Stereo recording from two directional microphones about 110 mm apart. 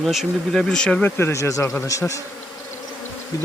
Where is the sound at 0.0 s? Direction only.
Centre (ahead or behind).